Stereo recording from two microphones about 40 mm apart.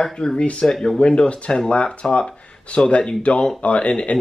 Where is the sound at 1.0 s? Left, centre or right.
Left.